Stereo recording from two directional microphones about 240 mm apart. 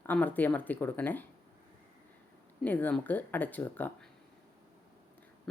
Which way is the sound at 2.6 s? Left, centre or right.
Centre.